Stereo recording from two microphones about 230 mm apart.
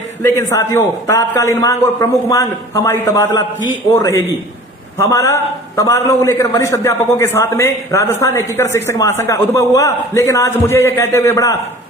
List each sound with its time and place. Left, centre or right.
0.2 s a man's voice: centre